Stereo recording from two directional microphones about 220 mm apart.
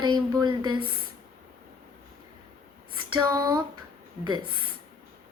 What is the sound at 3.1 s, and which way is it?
Speech, 15° right (ahead or behind).